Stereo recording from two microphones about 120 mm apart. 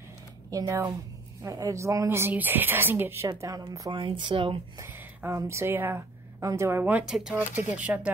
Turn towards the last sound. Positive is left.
turn(degrees=-10)  # may be behind; listen again after turning